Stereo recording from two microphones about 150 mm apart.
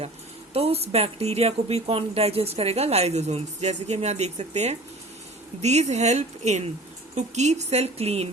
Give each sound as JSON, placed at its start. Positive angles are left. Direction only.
{"t": 0.5, "sound": "a woman's voice", "side_deg": -40}